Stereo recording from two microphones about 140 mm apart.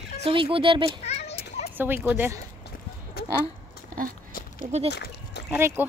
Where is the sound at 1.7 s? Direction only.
15° right (ahead or behind).